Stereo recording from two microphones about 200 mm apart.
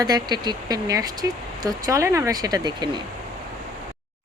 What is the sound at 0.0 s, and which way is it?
Speech, 20° right (ahead or behind).